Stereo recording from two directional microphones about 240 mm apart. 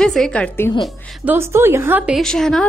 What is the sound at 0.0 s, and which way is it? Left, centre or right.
Speech, centre.